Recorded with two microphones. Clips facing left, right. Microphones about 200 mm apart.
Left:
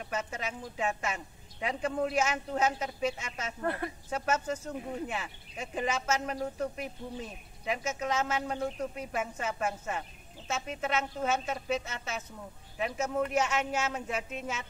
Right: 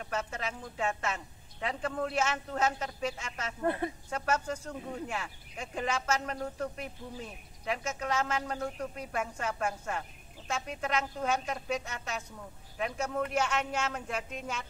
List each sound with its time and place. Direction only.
0.0 s speech: 10° left (ahead or behind)
3.6 s speech: 20° right (ahead or behind)
4.1 s a man's voice: 5° left (ahead or behind)